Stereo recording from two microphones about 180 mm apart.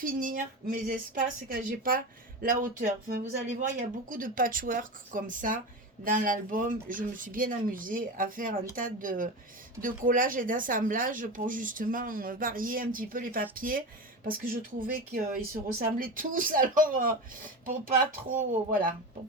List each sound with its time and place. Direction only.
0.0 s speech: 50° right (ahead or behind)